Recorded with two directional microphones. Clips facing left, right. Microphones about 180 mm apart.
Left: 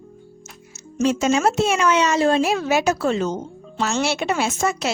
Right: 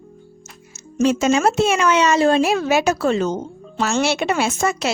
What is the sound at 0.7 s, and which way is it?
Speech, 70° right (ahead or behind).